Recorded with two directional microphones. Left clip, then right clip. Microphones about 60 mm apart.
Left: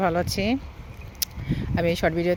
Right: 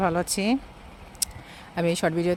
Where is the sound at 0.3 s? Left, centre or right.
Right.